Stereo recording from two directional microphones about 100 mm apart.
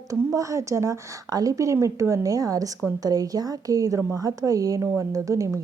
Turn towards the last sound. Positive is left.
turn(degrees=-30)  # may be behind; listen again after turning